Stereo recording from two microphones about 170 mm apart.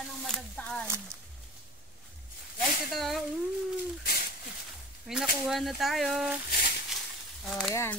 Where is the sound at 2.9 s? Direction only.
Centre (ahead or behind).